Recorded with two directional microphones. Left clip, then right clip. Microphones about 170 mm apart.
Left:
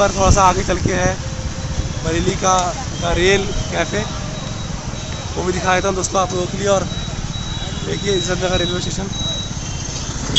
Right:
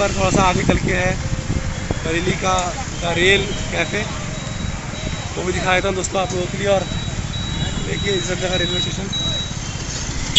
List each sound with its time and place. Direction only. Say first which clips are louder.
0.0 s speech: left 4 dB; 10° left (ahead or behind)
5.7 s speech: left 1 dB; 10° left (ahead or behind)
8.1 s speech: left 3 dB; 15° left (ahead or behind)